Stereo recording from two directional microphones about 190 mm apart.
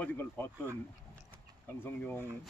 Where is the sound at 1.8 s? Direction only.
10° left (ahead or behind).